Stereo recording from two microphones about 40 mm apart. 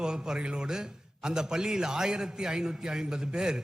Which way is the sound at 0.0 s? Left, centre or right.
Centre.